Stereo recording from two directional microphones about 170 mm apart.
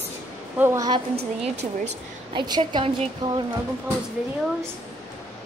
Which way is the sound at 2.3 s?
25° right (ahead or behind).